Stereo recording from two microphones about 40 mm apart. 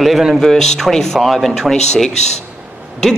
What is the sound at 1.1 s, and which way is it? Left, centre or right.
Speech, centre.